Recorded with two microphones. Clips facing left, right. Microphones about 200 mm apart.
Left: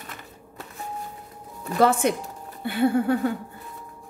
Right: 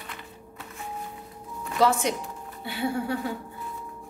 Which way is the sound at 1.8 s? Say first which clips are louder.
Left 3 dB; 55° left (ahead or behind).